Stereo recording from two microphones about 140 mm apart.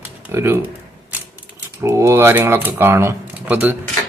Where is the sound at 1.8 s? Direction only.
20° right (ahead or behind).